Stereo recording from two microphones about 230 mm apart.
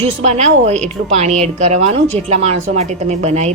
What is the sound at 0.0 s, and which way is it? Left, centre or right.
A woman's voice, right.